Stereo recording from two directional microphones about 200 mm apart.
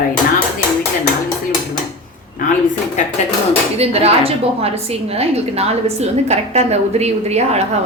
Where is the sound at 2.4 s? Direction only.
40° left (ahead or behind).